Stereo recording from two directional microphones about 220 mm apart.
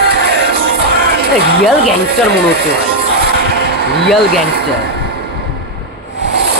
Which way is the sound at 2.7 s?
45° right (ahead or behind).